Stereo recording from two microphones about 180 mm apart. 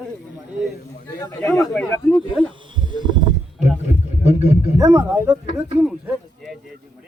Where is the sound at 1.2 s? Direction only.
20° left (ahead or behind).